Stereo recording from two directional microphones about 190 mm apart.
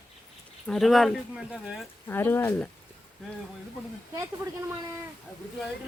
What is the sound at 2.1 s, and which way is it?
Speech, 10° left (ahead or behind).